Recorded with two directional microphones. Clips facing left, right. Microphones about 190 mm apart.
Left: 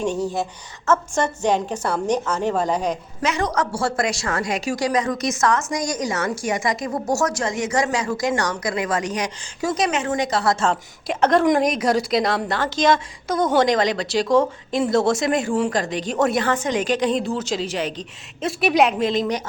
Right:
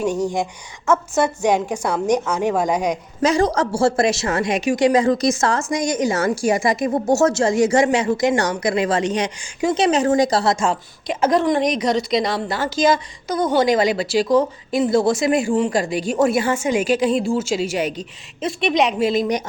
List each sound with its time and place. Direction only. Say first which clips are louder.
0.0 s a woman's voice: right 2 dB; 10° right (ahead or behind)
3.2 s a woman's voice: right 6 dB; 30° right (ahead or behind)
10.5 s a woman's voice: right 1 dB; 10° right (ahead or behind)
18.4 s a woman's voice: left 1 dB; 5° left (ahead or behind)